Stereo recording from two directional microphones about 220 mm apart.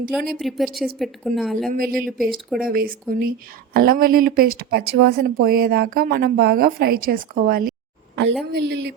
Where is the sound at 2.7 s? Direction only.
40° right (ahead or behind).